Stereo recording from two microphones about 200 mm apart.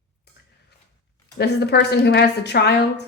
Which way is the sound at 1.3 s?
55° left (ahead or behind).